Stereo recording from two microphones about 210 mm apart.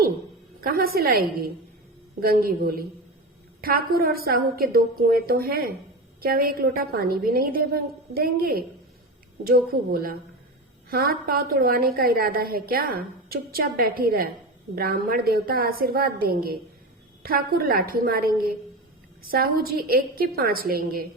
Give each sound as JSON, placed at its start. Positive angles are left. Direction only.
{"t": 0.6, "sound": "a woman's voice", "side_deg": -45}